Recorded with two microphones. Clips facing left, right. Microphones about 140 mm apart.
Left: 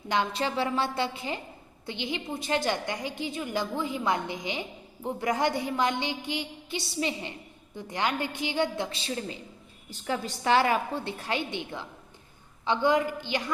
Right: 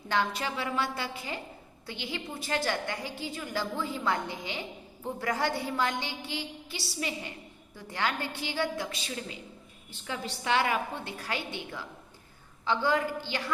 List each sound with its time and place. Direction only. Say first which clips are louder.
0.1 s a woman's voice: left 2 dB; 25° left (ahead or behind)
9.9 s a woman's voice: left 5 dB; 40° left (ahead or behind); by 13.4 s 20° left (ahead or behind)